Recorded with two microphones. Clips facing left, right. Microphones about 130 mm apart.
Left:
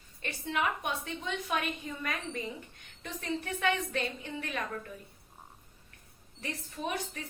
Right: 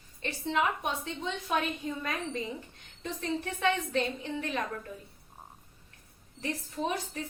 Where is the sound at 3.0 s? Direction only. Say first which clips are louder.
Right 3 dB; 25° right (ahead or behind).